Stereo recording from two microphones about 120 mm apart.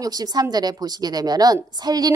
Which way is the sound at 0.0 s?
30° right (ahead or behind).